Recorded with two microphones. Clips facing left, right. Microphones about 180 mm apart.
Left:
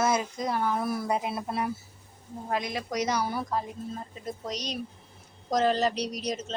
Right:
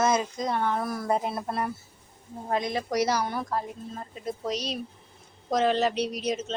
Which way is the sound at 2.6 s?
25° right (ahead or behind).